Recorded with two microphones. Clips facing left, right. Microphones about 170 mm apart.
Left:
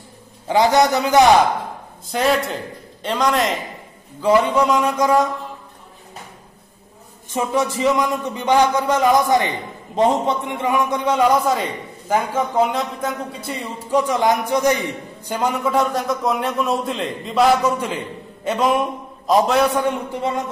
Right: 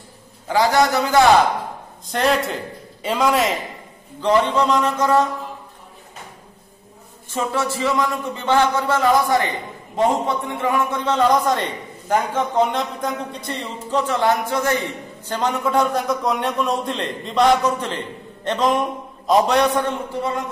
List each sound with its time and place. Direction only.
0.5 s a man's voice: 20° left (ahead or behind)
2.0 s a man's voice: centre (ahead or behind)
4.2 s a man's voice: 10° left (ahead or behind)
7.2 s a man's voice: 15° left (ahead or behind)